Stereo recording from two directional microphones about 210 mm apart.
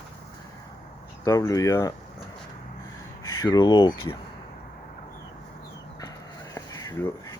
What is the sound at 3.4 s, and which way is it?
Speech, 20° left (ahead or behind).